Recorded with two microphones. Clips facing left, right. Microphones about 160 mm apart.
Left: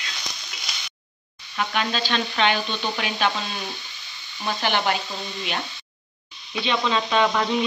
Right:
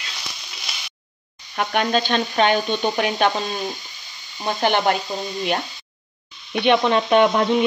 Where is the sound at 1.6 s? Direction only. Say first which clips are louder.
Right 5 dB; 50° right (ahead or behind).